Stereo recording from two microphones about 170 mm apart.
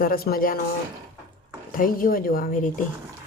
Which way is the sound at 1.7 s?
55° left (ahead or behind).